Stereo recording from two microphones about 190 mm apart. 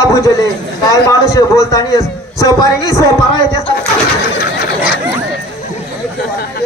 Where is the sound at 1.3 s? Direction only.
15° left (ahead or behind).